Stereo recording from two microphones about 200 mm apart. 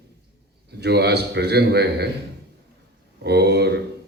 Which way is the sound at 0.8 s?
55° right (ahead or behind).